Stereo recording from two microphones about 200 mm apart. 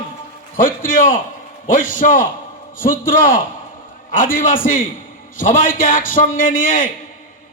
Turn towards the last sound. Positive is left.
turn(degrees=40)  # may be behind; listen again after turning